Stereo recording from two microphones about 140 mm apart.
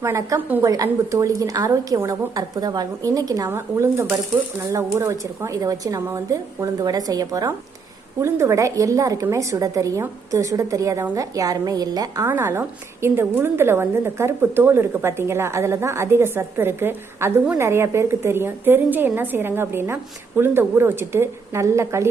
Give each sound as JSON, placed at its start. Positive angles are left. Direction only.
{"t": 0.0, "sound": "a woman's voice", "side_deg": -20}